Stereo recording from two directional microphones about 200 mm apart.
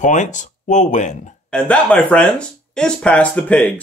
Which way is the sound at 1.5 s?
5° left (ahead or behind).